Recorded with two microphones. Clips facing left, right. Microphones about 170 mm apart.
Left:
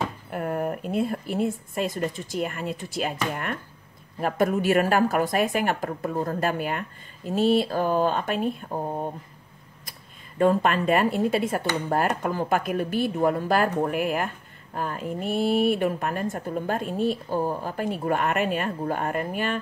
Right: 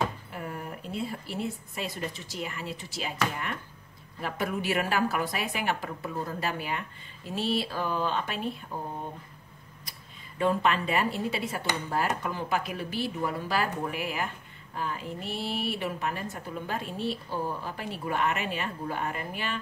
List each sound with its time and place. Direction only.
0.3 s speech: 55° left (ahead or behind)
9.8 s speech: 45° left (ahead or behind)